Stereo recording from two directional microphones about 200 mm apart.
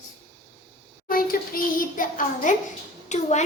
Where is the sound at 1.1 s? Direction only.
45° left (ahead or behind).